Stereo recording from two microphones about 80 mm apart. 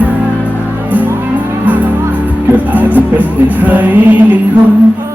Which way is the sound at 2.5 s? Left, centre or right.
Right.